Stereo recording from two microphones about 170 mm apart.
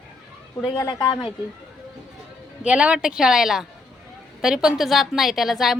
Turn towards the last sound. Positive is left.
turn(degrees=0)  # may be behind; listen again after turning